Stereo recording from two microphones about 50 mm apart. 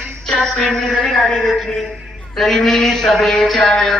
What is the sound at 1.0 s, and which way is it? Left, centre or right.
Speech, centre.